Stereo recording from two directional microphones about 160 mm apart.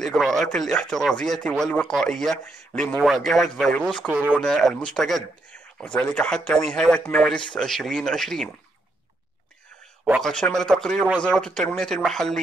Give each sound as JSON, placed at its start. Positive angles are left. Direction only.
{"t": 0.0, "sound": "speech", "side_deg": 0}
{"t": 4.1, "sound": "speech", "side_deg": -10}
{"t": 4.4, "sound": "speech", "side_deg": 0}
{"t": 10.2, "sound": "speech", "side_deg": 5}